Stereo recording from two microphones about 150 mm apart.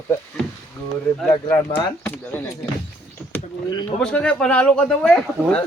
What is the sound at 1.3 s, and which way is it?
Speech, 15° left (ahead or behind).